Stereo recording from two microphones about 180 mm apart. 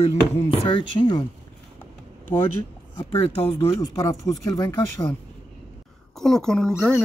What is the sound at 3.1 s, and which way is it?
Speech, 30° left (ahead or behind).